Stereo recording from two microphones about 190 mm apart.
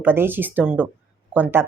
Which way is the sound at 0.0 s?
10° right (ahead or behind).